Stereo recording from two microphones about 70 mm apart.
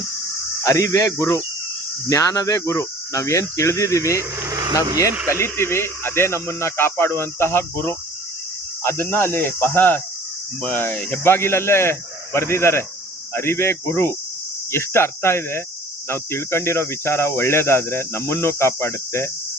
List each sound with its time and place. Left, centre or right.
0.6 s speech: left
4.2 s speech: right
5.3 s speech: left